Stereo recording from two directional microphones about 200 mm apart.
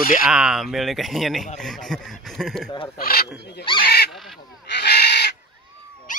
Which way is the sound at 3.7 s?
50° left (ahead or behind).